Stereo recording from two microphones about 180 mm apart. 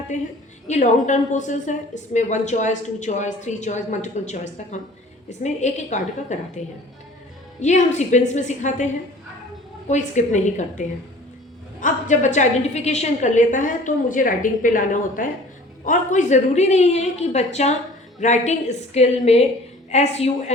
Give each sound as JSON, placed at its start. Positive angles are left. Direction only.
{"t": 0.1, "sound": "a woman's voice", "side_deg": 40}
{"t": 7.6, "sound": "a woman's voice", "side_deg": 40}
{"t": 9.9, "sound": "a woman's voice", "side_deg": 40}